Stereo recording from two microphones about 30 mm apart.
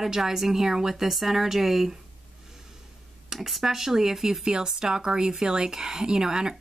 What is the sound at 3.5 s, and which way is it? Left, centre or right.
Speech, centre.